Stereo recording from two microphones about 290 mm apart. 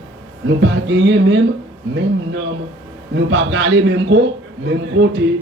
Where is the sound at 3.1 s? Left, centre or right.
Right.